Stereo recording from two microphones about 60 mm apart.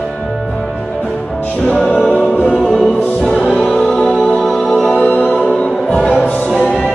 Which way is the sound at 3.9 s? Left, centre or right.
Left.